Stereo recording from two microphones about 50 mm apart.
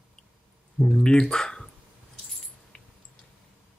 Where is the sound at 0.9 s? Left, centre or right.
Centre.